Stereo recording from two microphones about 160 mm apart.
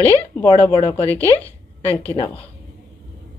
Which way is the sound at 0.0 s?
15° left (ahead or behind).